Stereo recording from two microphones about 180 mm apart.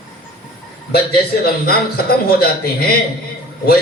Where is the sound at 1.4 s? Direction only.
60° left (ahead or behind).